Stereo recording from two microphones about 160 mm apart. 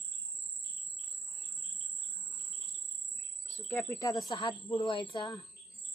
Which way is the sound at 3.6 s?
15° left (ahead or behind).